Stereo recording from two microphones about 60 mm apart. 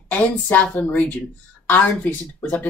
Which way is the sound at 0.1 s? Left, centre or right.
Left.